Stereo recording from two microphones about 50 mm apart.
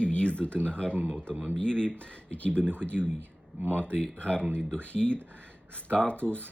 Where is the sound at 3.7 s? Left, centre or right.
Left.